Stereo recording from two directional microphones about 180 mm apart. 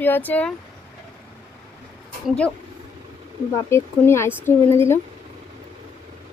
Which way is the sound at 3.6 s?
15° left (ahead or behind).